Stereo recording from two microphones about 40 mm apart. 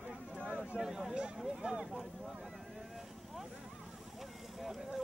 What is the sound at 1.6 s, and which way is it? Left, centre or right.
Speech, right.